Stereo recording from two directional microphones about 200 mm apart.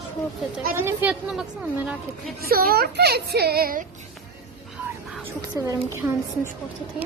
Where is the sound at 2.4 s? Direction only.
50° right (ahead or behind).